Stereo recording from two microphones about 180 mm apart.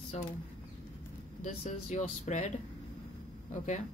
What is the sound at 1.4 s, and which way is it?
A woman's voice, 40° left (ahead or behind).